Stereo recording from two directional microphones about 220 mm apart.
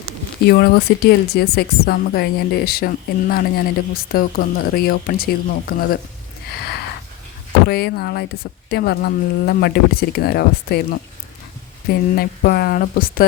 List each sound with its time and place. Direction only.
0.4 s a woman's voice: 45° left (ahead or behind)
7.7 s a woman's voice: 45° left (ahead or behind)
11.9 s a woman's voice: 45° left (ahead or behind)